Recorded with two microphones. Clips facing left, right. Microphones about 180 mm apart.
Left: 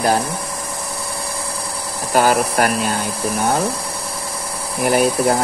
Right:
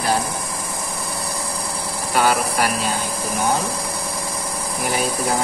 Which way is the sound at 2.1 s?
50° left (ahead or behind).